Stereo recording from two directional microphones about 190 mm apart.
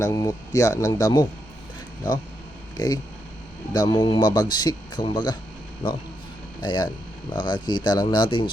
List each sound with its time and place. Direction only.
0.0 s speech: 20° left (ahead or behind)
2.7 s speech: 20° left (ahead or behind)